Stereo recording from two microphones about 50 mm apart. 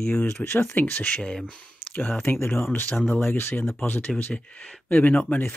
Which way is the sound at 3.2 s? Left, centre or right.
Left.